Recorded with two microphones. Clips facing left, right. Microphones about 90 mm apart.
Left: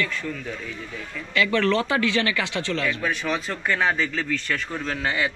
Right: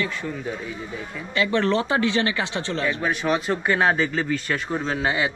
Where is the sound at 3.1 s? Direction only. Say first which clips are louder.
Right 4 dB; 15° right (ahead or behind).